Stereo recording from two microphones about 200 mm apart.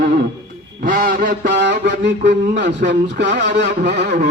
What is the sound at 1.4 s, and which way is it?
A man's voice, 60° right (ahead or behind).